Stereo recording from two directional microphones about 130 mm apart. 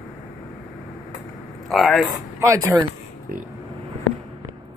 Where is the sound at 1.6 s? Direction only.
Centre (ahead or behind).